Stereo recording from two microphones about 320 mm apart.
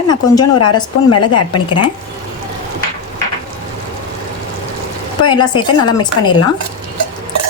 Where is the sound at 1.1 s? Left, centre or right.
Left.